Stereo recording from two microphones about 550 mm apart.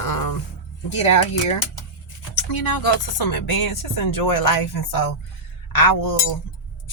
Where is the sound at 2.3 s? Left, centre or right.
Left.